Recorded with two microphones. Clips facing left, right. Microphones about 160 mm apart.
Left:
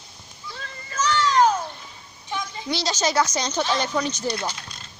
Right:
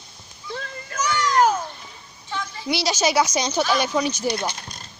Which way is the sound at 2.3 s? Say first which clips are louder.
Even; 20° left (ahead or behind).